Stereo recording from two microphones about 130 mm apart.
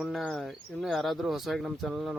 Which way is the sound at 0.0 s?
Centre (ahead or behind).